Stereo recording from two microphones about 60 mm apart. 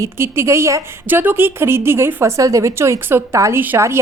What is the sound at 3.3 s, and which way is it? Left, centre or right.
Speech, right.